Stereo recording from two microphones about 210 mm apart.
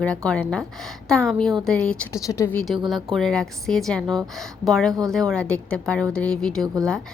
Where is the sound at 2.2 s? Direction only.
15° left (ahead or behind).